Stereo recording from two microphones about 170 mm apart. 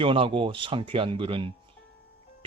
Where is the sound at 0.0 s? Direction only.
30° right (ahead or behind).